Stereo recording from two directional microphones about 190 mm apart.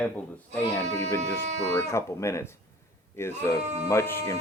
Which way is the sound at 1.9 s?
15° left (ahead or behind).